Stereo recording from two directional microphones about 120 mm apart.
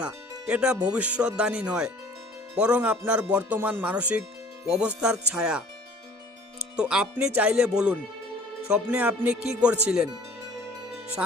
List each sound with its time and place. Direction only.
0.0 s speech: 10° right (ahead or behind)
6.7 s speech: 5° right (ahead or behind)
8.7 s speech: 10° right (ahead or behind)